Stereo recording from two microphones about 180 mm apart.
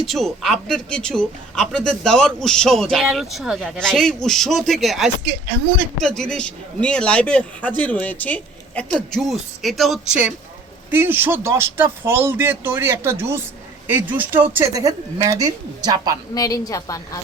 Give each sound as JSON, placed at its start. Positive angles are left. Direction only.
{"t": 0.1, "sound": "a woman's voice", "side_deg": 0}
{"t": 16.3, "sound": "a woman's voice", "side_deg": 20}